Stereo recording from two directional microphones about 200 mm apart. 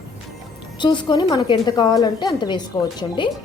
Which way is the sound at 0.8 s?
20° left (ahead or behind).